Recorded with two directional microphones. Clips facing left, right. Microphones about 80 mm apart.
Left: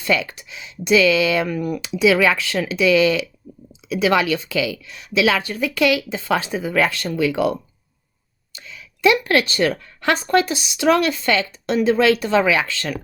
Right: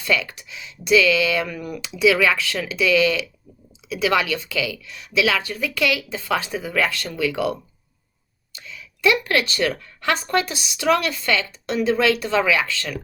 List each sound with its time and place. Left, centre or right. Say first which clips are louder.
0.0 s speech: left 2 dB; left
9.2 s speech: left 3 dB; left